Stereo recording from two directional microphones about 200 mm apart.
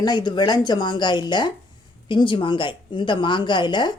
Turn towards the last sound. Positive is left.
turn(degrees=20)  # may be behind; listen again after turning